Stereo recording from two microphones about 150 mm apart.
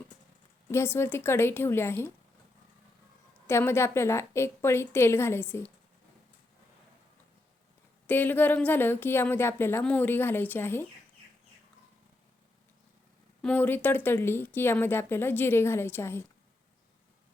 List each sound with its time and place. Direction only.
0.7 s a woman's voice: 15° left (ahead or behind)
3.4 s a woman's voice: 15° left (ahead or behind)
8.0 s a woman's voice: 15° left (ahead or behind)
13.4 s a woman's voice: 10° left (ahead or behind)